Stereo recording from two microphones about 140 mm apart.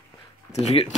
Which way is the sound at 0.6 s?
55° left (ahead or behind).